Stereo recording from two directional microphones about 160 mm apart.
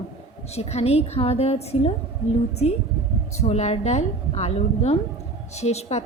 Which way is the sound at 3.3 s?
45° left (ahead or behind).